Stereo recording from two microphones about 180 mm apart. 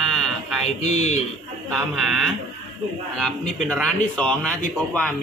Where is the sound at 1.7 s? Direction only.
Centre (ahead or behind).